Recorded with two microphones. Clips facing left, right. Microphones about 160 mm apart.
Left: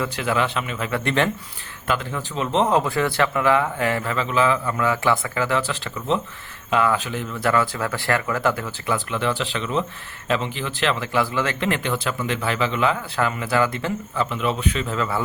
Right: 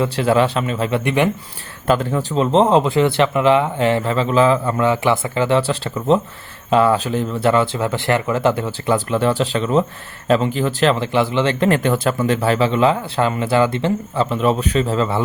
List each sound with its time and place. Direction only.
0.0 s speech: 35° right (ahead or behind)
0.9 s speech: 20° right (ahead or behind)
1.9 s speech: 35° right (ahead or behind)
11.1 s speech: 20° right (ahead or behind)
11.6 s speech: 40° right (ahead or behind)